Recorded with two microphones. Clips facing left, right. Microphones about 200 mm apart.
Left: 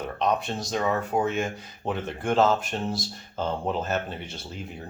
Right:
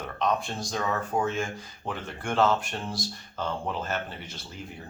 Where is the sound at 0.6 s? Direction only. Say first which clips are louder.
Left 4 dB; 20° left (ahead or behind).